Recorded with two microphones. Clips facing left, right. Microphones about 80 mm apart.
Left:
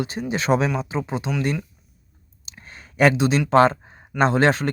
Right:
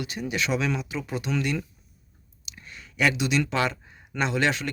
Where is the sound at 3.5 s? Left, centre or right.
Left.